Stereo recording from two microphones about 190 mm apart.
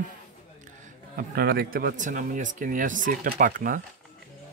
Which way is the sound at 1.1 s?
55° right (ahead or behind).